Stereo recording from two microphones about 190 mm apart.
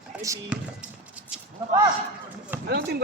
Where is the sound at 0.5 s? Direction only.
5° right (ahead or behind).